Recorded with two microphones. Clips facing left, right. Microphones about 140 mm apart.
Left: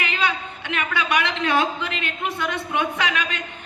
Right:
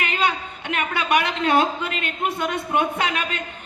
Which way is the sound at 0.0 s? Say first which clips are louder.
Right 2 dB; 50° right (ahead or behind).